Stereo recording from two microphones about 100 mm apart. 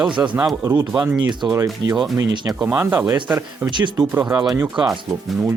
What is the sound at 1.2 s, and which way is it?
Speech, 50° right (ahead or behind).